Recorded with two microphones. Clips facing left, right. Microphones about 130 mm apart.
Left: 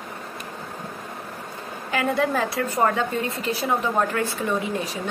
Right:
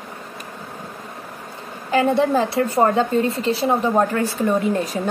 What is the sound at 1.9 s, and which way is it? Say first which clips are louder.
A woman's voice: right 6 dB; 30° right (ahead or behind).